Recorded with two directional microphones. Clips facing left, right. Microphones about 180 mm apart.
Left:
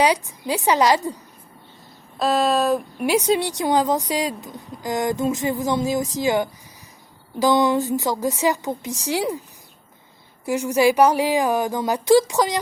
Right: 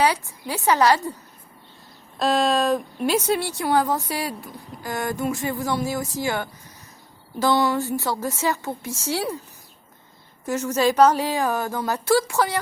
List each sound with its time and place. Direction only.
0.0 s speech: 15° left (ahead or behind)
2.1 s speech: centre (ahead or behind)
3.0 s speech: 15° left (ahead or behind)
10.4 s speech: 15° left (ahead or behind)